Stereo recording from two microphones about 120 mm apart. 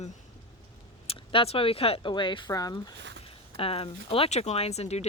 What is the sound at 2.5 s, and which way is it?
Speech, 30° left (ahead or behind).